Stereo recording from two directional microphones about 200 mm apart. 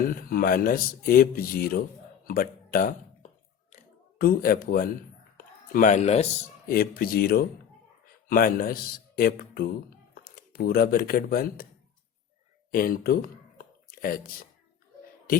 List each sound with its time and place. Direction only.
0.2 s a man's voice: 45° left (ahead or behind)
3.7 s a sound: 45° left (ahead or behind)
5.7 s speech: 40° left (ahead or behind)
6.7 s a man's voice: 50° left (ahead or behind)
12.7 s a man's voice: 45° left (ahead or behind)
13.6 s a sound: 45° left (ahead or behind)